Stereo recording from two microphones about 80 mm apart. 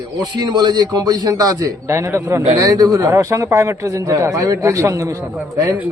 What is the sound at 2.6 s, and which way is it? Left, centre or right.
Speech, right.